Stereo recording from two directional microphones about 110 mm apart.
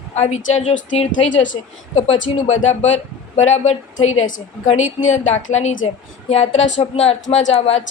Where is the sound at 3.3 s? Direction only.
90° left.